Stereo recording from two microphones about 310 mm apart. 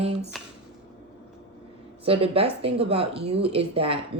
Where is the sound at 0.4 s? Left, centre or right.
Centre.